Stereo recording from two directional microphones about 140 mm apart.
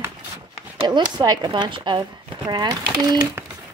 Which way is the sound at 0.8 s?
30° right (ahead or behind).